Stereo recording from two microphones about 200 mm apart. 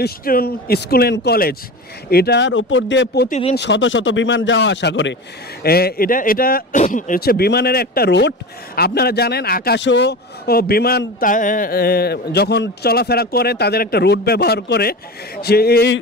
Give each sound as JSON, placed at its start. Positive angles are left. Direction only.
{"t": 0.0, "sound": "speech", "side_deg": 50}
{"t": 3.3, "sound": "speech", "side_deg": 30}
{"t": 3.5, "sound": "speech", "side_deg": 60}
{"t": 5.6, "sound": "speech", "side_deg": 50}